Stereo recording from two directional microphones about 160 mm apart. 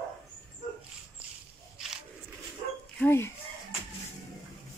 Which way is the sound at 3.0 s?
15° left (ahead or behind).